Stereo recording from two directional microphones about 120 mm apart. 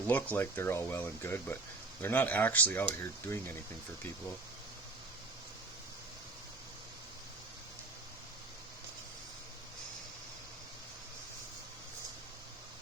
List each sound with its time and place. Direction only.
0.1 s speech: 15° left (ahead or behind)